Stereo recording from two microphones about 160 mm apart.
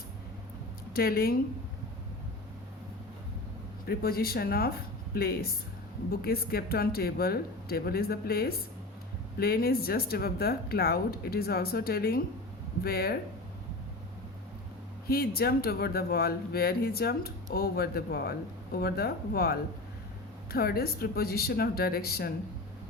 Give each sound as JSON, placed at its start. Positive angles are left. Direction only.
{"t": 0.9, "sound": "speech", "side_deg": 70}
{"t": 3.8, "sound": "speech", "side_deg": 70}
{"t": 15.0, "sound": "speech", "side_deg": 70}